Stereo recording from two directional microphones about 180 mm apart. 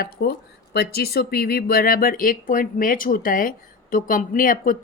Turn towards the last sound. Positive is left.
turn(degrees=50)  # may be behind; listen again after turning